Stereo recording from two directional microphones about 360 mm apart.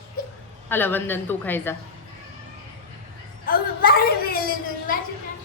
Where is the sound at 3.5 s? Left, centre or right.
Left.